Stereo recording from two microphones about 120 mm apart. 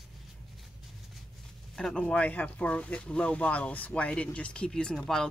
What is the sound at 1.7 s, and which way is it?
Speech, 5° left (ahead or behind).